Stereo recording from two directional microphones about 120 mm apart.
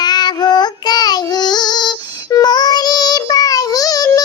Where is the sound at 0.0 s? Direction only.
35° left (ahead or behind).